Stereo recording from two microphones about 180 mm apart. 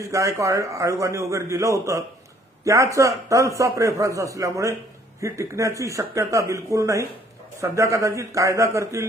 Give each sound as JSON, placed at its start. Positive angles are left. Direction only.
{"t": 0.0, "sound": "a man's voice", "side_deg": -15}